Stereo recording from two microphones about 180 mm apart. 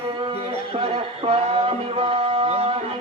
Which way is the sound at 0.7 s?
35° right (ahead or behind).